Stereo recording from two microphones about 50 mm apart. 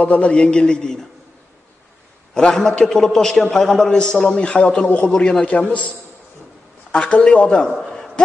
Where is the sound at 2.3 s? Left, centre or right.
Centre.